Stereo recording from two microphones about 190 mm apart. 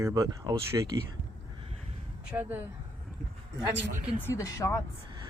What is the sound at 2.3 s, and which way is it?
Speech, 10° right (ahead or behind).